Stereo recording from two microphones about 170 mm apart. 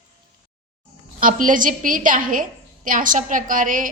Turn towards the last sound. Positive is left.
turn(degrees=-50)  # may be behind; listen again after turning